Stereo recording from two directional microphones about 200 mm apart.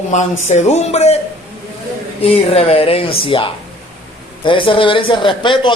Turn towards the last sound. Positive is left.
turn(degrees=25)  # may be behind; listen again after turning